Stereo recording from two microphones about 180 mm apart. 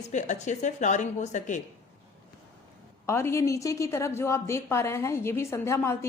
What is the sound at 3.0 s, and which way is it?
A woman's voice, 15° left (ahead or behind).